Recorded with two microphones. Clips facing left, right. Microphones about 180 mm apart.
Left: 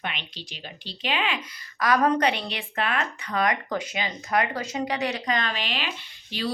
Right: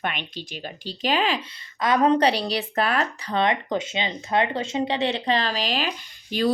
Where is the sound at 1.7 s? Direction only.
25° right (ahead or behind).